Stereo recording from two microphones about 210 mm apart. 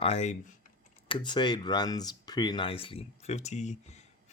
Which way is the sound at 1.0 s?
20° left (ahead or behind).